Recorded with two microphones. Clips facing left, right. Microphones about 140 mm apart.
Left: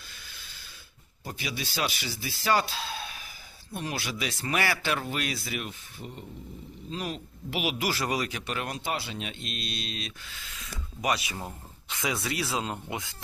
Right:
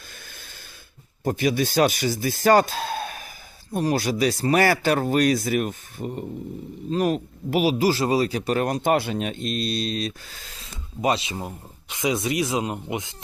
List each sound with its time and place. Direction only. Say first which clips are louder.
0.1 s snort: right 5 dB; 50° right (ahead or behind)
1.2 s speech: right 14 dB; 50° right (ahead or behind); by 13.1 s 20° right (ahead or behind)